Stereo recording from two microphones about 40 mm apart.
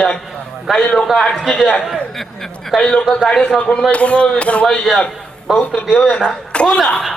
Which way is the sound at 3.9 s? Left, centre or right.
Left.